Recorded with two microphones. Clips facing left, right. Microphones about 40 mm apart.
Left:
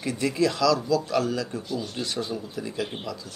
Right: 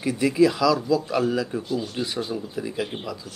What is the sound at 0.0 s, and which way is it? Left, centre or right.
A man's voice, centre.